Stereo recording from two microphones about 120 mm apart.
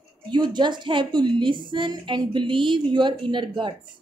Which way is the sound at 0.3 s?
40° right (ahead or behind).